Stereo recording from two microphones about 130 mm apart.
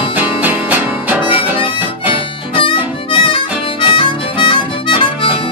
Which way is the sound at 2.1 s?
40° left (ahead or behind).